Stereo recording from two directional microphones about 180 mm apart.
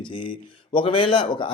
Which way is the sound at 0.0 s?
30° left (ahead or behind).